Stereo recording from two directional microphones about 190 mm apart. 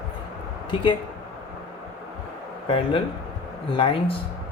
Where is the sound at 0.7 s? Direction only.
25° left (ahead or behind).